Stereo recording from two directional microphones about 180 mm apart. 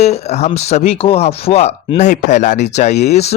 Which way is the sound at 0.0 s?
35° left (ahead or behind).